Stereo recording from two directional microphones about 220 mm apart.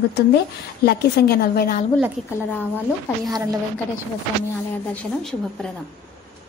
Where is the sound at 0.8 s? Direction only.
45° left (ahead or behind).